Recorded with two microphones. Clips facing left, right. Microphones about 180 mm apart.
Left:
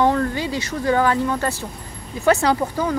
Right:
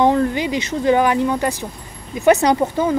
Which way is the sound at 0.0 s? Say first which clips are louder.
Right 3 dB; 20° right (ahead or behind).